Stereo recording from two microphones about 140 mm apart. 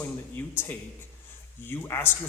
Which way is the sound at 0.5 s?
15° left (ahead or behind).